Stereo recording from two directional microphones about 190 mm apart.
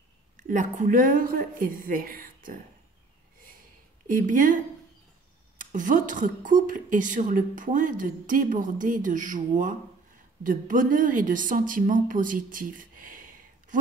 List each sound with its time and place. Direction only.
0.4 s speech: 40° right (ahead or behind)
4.1 s speech: 45° right (ahead or behind)
5.6 s speech: 45° right (ahead or behind)